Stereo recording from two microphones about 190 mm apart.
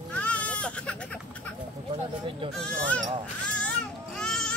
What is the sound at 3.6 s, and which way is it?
Baby cry, 5° left (ahead or behind).